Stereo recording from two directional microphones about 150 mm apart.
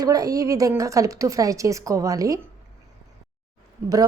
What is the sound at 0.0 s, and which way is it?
A woman's voice, 25° right (ahead or behind).